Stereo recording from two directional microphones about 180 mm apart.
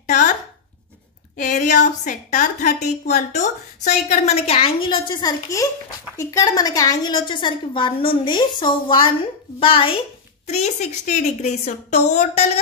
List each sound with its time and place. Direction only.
0.0 s chopping: 45° left (ahead or behind)
1.3 s a woman's voice: 45° left (ahead or behind)